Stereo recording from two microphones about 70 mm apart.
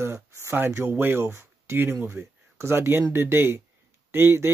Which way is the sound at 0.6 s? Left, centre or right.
Right.